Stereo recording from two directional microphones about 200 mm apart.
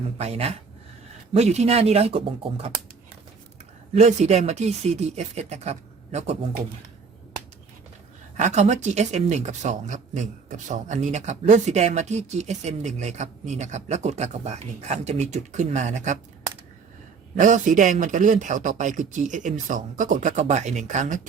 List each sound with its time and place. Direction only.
0.2 s speech: 30° right (ahead or behind)
3.9 s speech: 35° right (ahead or behind)
8.4 s speech: 35° right (ahead or behind)
17.3 s speech: 40° right (ahead or behind)